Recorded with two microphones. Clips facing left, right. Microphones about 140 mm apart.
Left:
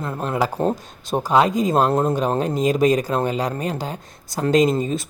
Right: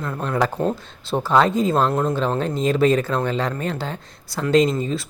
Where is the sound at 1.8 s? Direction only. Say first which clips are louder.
Left 2 dB; 35° left (ahead or behind).